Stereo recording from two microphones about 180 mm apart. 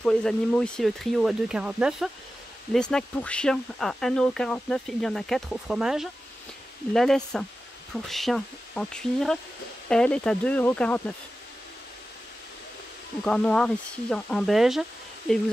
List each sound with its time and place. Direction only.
0.0 s speech: 5° left (ahead or behind)
13.2 s speech: 5° left (ahead or behind)